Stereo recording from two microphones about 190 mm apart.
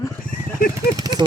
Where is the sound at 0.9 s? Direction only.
20° right (ahead or behind).